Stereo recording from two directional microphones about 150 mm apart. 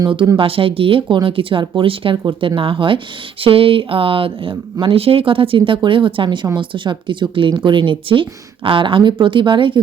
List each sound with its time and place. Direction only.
0.0 s speech: 35° right (ahead or behind)